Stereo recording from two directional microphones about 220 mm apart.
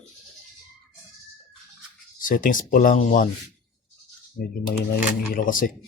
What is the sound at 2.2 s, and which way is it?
Speech, 40° left (ahead or behind).